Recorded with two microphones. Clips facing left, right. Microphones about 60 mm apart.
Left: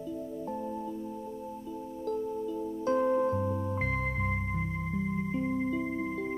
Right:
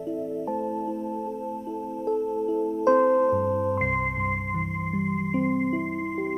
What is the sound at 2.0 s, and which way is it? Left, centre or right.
Music, right.